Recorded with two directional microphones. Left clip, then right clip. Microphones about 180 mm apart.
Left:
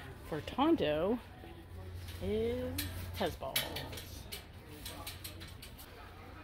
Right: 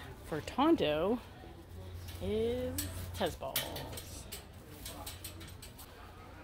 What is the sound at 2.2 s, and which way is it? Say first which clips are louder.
Speech: right 1 dB; 5° left (ahead or behind).